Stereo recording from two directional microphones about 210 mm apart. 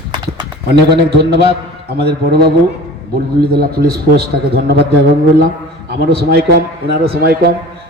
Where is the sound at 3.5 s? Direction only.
45° right (ahead or behind).